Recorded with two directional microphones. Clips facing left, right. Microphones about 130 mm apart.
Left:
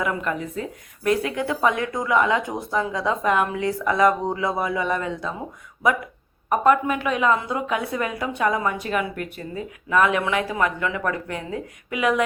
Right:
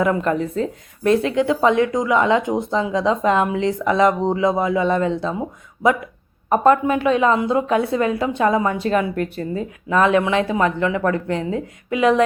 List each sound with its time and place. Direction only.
0.0 s speech: 30° right (ahead or behind)
6.5 s speech: 30° right (ahead or behind)